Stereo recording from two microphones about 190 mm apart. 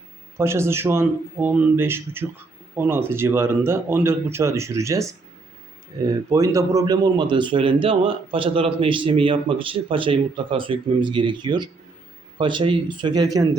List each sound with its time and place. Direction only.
0.3 s speech: 15° right (ahead or behind)
6.3 s a man's voice: 15° right (ahead or behind)